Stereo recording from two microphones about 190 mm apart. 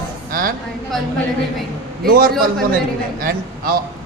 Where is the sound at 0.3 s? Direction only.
50° right (ahead or behind).